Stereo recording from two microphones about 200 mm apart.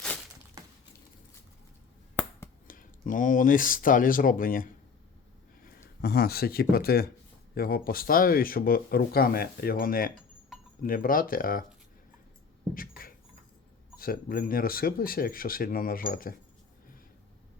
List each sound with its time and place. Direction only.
2.6 s speech: 40° left (ahead or behind)
12.7 s keys jangling: 45° left (ahead or behind)
14.0 s speech: 45° left (ahead or behind)